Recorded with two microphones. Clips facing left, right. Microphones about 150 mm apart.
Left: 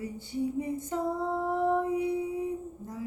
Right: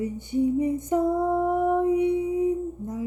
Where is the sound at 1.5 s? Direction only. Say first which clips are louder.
Right 2 dB; 15° right (ahead or behind).